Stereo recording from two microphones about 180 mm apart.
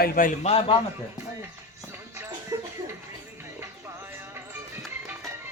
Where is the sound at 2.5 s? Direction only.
20° right (ahead or behind).